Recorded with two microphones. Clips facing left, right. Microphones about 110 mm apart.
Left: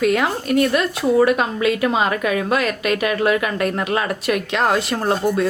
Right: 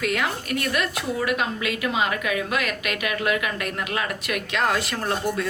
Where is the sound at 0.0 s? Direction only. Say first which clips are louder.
Left 7 dB; 25° left (ahead or behind).